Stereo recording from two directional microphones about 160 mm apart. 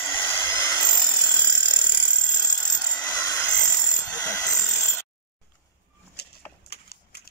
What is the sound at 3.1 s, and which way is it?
Wood, 20° left (ahead or behind).